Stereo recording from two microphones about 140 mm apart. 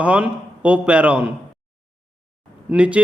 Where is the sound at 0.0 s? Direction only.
10° right (ahead or behind).